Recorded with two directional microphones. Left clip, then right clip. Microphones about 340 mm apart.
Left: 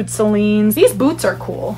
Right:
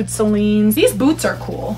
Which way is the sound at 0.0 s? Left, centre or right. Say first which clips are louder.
Left 2 dB; left.